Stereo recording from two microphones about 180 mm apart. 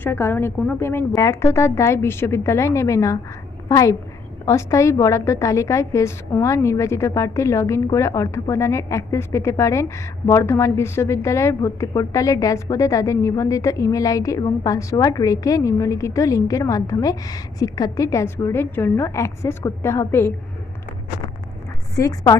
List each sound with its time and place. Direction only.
0.0 s a woman's voice: 10° left (ahead or behind)
21.9 s a woman's voice: 20° left (ahead or behind)